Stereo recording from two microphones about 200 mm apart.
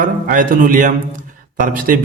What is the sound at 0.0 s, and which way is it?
A man's voice, 40° right (ahead or behind).